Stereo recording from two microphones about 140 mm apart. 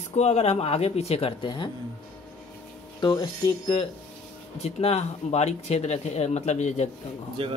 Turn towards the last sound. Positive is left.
turn(degrees=-40)  # may be behind; listen again after turning